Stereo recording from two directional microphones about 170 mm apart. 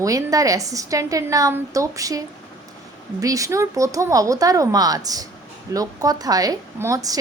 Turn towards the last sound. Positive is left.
turn(degrees=-20)  # may be behind; listen again after turning